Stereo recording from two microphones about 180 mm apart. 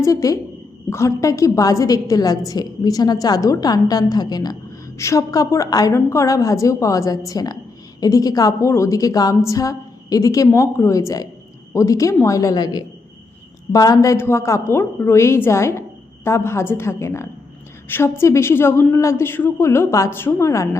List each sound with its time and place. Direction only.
0.0 s a man's voice: 20° left (ahead or behind)